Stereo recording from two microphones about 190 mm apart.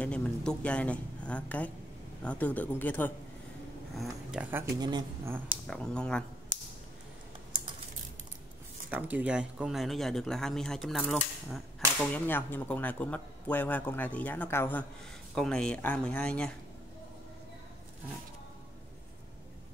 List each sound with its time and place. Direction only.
0.0 s speech: 5° left (ahead or behind)
3.9 s speech: centre (ahead or behind)
4.7 s speech: 20° right (ahead or behind)
5.7 s speech: 5° left (ahead or behind)
8.9 s speech: 10° right (ahead or behind)